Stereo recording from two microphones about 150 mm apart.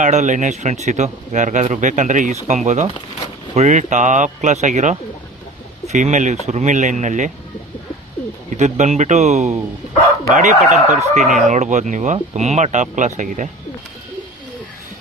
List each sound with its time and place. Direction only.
0.0 s speech: 55° right (ahead or behind)
8.4 s speech: 50° right (ahead or behind)
11.2 s speech: centre (ahead or behind)
11.4 s speech: 55° right (ahead or behind)